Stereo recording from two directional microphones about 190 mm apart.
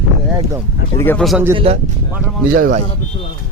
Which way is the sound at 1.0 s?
10° left (ahead or behind).